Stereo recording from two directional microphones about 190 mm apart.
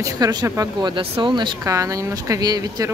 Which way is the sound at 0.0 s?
20° right (ahead or behind).